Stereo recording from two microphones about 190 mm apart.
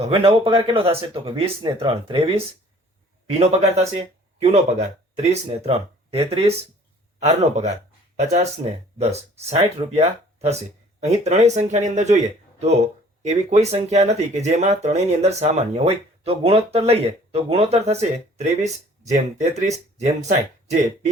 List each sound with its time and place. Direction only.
0.0 s speech: 30° right (ahead or behind)